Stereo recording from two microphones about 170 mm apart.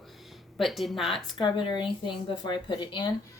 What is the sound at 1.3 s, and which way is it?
Speech, 30° left (ahead or behind).